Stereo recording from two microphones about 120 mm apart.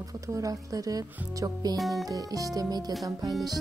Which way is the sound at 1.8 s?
Centre (ahead or behind).